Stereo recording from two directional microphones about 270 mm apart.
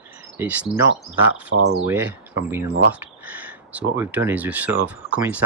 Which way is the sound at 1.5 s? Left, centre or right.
Right.